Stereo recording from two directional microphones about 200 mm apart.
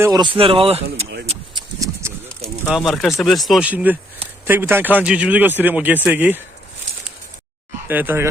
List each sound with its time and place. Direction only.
0.0 s speech: 20° right (ahead or behind)
1.8 s a sound: 15° right (ahead or behind)
2.6 s speech: centre (ahead or behind)
7.9 s speech: 10° right (ahead or behind)